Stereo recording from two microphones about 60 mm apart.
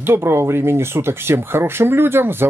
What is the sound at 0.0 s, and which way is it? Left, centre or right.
Speech, right.